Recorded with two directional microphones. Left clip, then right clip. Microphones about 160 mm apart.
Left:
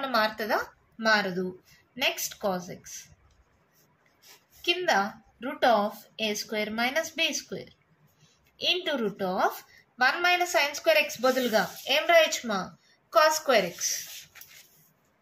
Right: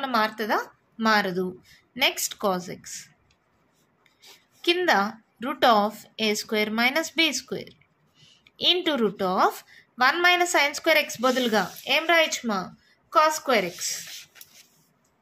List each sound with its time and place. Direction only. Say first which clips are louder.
0.0 s a woman's voice: right 2 dB; 40° right (ahead or behind); by 3.0 s 55° right (ahead or behind)
4.6 s a woman's voice: right 4 dB; 55° right (ahead or behind); by 13.7 s 35° right (ahead or behind)